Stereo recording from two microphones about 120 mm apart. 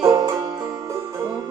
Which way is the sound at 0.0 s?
30° right (ahead or behind).